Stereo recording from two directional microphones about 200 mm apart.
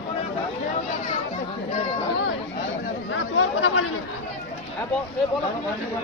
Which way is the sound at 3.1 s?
65° left (ahead or behind).